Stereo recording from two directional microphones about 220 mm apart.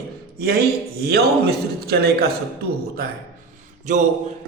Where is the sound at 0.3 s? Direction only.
45° right (ahead or behind).